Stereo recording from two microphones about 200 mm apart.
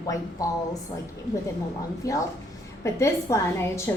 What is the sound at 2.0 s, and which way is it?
A woman's voice, 15° left (ahead or behind).